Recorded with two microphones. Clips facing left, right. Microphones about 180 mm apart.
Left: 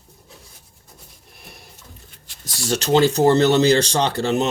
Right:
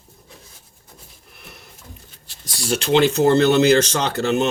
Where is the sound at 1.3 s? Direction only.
30° left (ahead or behind).